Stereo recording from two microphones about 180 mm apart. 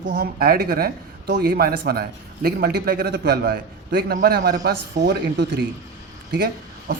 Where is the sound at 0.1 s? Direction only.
60° right (ahead or behind).